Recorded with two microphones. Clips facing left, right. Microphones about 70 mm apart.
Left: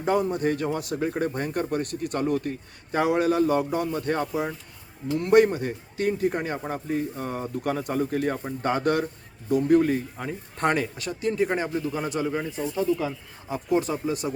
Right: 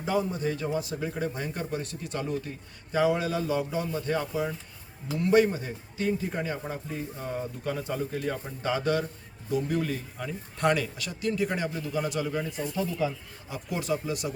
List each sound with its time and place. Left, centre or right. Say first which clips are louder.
0.0 s speech: left 5 dB; left
13.5 s speech: left 6 dB; left